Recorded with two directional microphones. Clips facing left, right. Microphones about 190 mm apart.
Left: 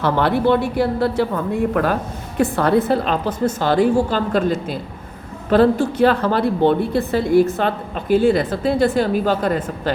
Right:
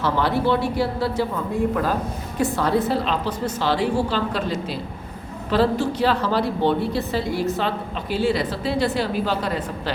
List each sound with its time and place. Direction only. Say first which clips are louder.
0.0 s a woman's voice: left 4 dB; 60° left (ahead or behind)